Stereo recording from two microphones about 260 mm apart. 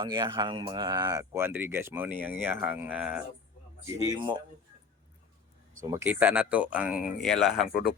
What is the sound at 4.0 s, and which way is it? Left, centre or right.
Speech, centre.